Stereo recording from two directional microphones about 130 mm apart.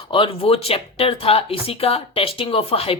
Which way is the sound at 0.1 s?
45° left (ahead or behind).